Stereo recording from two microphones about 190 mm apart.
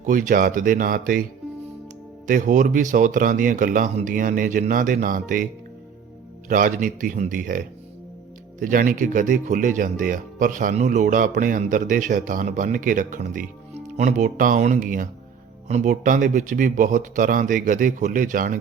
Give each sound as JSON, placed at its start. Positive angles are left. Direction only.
{"t": 0.0, "sound": "speech", "side_deg": -45}
{"t": 2.2, "sound": "speech", "side_deg": -40}
{"t": 6.5, "sound": "speech", "side_deg": -45}